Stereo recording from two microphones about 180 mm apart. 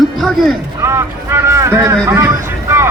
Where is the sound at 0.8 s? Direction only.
15° right (ahead or behind).